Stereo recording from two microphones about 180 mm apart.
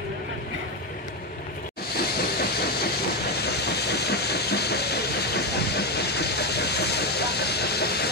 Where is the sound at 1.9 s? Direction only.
60° left (ahead or behind).